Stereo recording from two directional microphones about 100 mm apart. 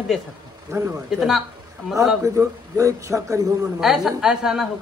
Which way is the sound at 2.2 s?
30° right (ahead or behind).